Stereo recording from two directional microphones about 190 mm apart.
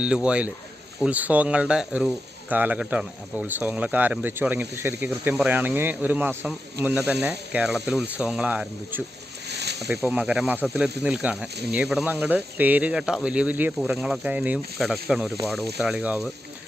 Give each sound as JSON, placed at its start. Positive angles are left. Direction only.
{"t": 0.0, "sound": "speech", "side_deg": -5}
{"t": 9.5, "sound": "snake", "side_deg": -60}
{"t": 9.9, "sound": "speech", "side_deg": -10}